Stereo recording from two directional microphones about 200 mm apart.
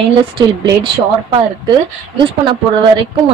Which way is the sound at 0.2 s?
25° right (ahead or behind).